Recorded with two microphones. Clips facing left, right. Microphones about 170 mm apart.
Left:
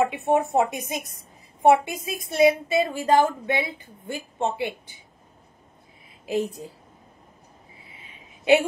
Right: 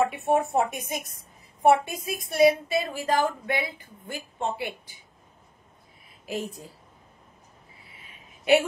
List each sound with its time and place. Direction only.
0.1 s a woman's voice: 20° left (ahead or behind)
6.2 s a woman's voice: 20° left (ahead or behind)